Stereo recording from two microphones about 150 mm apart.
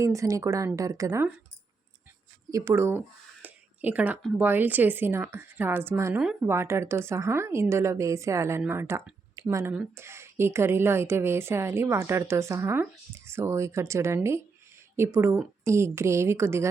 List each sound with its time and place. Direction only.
0.0 s speech: 20° right (ahead or behind)
2.5 s a woman's voice: 20° right (ahead or behind)
3.4 s a sound: 10° right (ahead or behind)
4.4 s a woman's voice: 10° right (ahead or behind)